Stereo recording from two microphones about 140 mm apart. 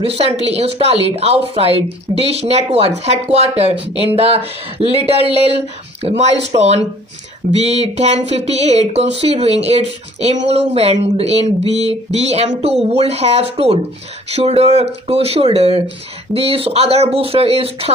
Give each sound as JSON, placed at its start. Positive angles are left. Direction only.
{"t": 0.0, "sound": "speech", "side_deg": -45}